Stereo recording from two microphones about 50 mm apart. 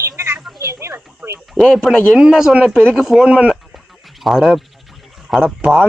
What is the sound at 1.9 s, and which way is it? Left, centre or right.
Speech, centre.